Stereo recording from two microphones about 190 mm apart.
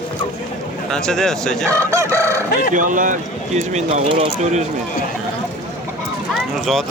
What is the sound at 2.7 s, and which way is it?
Speech, 45° right (ahead or behind).